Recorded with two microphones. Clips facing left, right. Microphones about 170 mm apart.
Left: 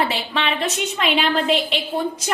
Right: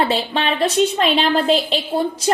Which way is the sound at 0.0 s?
35° right (ahead or behind).